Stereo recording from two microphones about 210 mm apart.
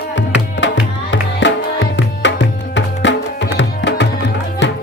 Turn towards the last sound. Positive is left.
turn(degrees=60)  # may be behind; listen again after turning